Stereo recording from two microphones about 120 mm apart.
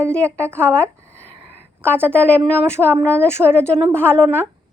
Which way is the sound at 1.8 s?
10° left (ahead or behind).